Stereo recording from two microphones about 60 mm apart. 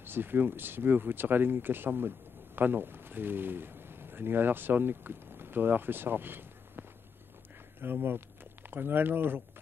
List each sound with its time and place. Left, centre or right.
0.0 s speech: right